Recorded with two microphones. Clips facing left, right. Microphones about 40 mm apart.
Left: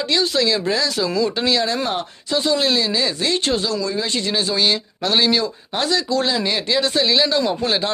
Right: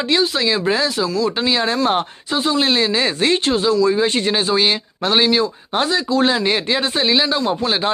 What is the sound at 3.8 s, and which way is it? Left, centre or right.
Speech, right.